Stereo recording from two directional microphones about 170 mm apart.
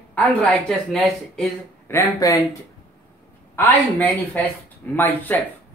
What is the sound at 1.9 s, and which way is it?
Speech, 15° left (ahead or behind).